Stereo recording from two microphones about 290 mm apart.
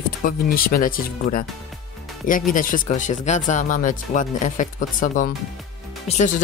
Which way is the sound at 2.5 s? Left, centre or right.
Left.